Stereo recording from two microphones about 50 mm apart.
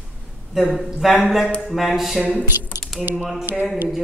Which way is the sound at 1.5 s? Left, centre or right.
Centre.